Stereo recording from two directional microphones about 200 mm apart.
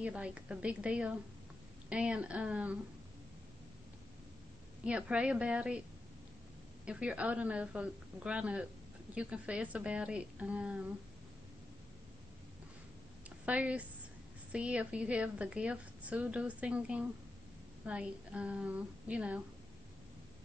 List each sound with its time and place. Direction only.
0.0 s a woman's voice: 5° right (ahead or behind)
4.8 s a woman's voice: 5° right (ahead or behind)
6.9 s a woman's voice: 5° right (ahead or behind)
13.5 s a woman's voice: 5° right (ahead or behind)